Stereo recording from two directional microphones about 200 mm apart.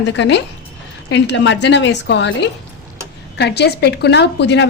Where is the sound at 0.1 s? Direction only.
60° left (ahead or behind).